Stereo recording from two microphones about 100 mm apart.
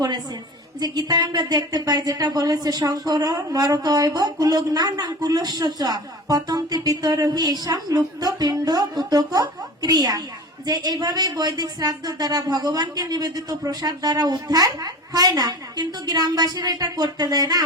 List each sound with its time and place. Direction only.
0.8 s speech: 45° right (ahead or behind)